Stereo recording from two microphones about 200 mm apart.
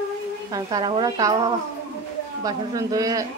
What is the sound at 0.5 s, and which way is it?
A woman's voice, 20° right (ahead or behind).